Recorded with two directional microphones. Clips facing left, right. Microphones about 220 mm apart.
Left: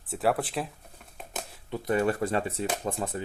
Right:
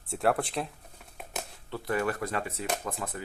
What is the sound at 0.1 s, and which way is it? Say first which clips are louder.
Speech: left 1 dB; centre (ahead or behind).